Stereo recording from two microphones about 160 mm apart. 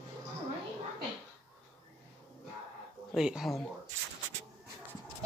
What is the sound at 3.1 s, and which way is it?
Speech, 5° right (ahead or behind).